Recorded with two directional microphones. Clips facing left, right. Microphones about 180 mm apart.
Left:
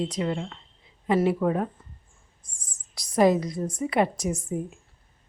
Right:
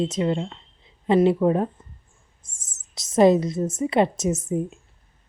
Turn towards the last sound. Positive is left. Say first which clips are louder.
# right 5 dB
turn(degrees=-25)  # may be behind; listen again after turning